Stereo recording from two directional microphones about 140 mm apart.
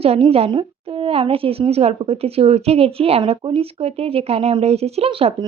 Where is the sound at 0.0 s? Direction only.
45° right (ahead or behind).